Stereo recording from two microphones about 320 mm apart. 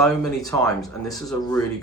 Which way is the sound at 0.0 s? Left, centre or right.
Centre.